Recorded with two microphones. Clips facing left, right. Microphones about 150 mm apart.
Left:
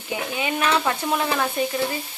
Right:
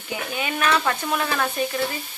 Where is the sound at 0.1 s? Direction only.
20° left (ahead or behind).